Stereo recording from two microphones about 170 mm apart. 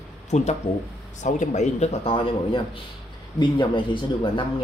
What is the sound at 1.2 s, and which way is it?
Speech, 45° left (ahead or behind).